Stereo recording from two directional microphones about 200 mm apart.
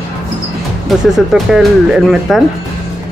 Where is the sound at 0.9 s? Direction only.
Centre (ahead or behind).